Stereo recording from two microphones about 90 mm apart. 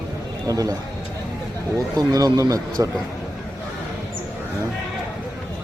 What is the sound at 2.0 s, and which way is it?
Speech, 40° right (ahead or behind).